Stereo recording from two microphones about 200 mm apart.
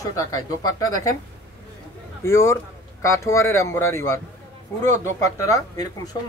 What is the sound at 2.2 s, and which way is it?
Speech, 15° left (ahead or behind).